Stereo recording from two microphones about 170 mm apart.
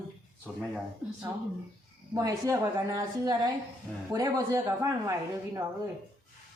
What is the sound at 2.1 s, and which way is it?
A woman's voice, 20° right (ahead or behind).